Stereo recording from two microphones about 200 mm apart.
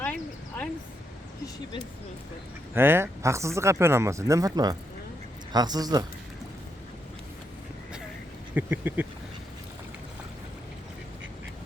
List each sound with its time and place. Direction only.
0.0 s a sound: 10° left (ahead or behind)
2.7 s speech: 10° right (ahead or behind)
8.5 s speech: 10° right (ahead or behind)